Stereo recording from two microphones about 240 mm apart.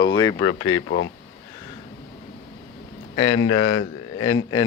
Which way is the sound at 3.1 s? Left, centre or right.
Left.